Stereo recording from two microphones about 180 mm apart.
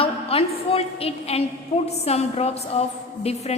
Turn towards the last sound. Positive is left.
turn(degrees=35)  # may be behind; listen again after turning